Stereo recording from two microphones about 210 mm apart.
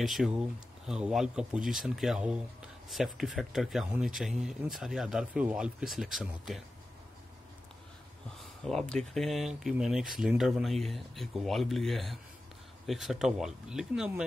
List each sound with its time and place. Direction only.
0.0 s a man's voice: centre (ahead or behind)
8.6 s a man's voice: 5° left (ahead or behind)